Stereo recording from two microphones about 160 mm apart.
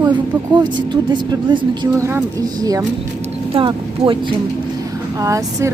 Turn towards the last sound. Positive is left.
turn(degrees=-20)  # may be behind; listen again after turning